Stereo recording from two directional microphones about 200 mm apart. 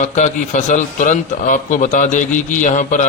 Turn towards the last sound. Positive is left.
turn(degrees=40)  # may be behind; listen again after turning